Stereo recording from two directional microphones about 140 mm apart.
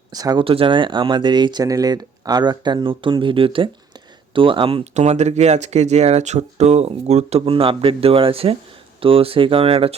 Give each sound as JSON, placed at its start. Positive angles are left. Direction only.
{"t": 0.1, "sound": "speech", "side_deg": -25}
{"t": 0.4, "sound": "speech", "side_deg": -40}